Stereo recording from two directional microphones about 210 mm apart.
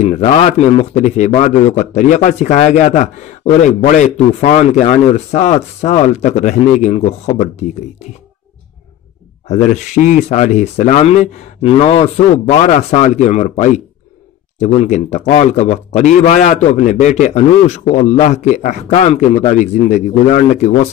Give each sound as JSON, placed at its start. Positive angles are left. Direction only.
{"t": 0.0, "sound": "a man's voice", "side_deg": 30}
{"t": 9.5, "sound": "a man's voice", "side_deg": 35}